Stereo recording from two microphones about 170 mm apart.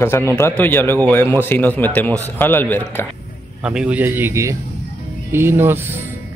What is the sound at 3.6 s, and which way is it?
A man's voice, 5° right (ahead or behind).